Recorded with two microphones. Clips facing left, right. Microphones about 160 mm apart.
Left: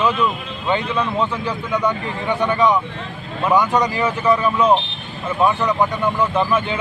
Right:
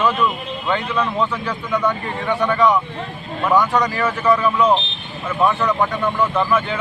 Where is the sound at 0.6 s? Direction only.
20° left (ahead or behind).